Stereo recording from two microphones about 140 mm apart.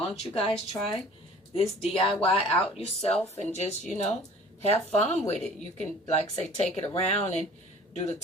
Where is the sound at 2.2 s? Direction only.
45° left (ahead or behind).